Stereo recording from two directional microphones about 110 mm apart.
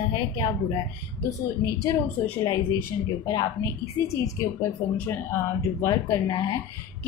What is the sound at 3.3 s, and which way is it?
Speech, 35° left (ahead or behind).